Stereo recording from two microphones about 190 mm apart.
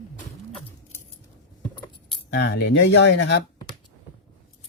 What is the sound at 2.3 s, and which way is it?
Speech, 60° left (ahead or behind).